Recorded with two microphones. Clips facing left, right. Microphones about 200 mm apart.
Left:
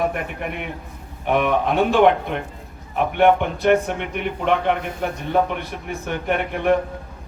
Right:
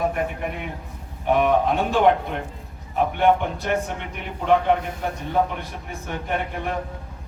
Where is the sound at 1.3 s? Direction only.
75° left (ahead or behind).